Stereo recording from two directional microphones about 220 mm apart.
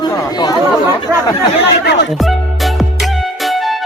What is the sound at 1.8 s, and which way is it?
Speech, 50° left (ahead or behind).